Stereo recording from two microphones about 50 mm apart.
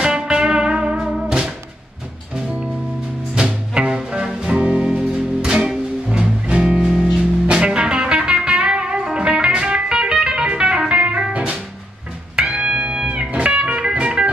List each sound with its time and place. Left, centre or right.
0.0 s music: centre
3.3 s music: centre